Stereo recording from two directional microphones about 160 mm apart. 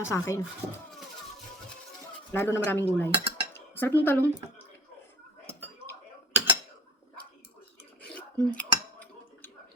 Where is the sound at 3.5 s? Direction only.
15° left (ahead or behind).